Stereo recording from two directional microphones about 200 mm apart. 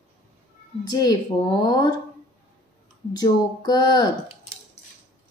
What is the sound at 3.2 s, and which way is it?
Speech, 20° left (ahead or behind).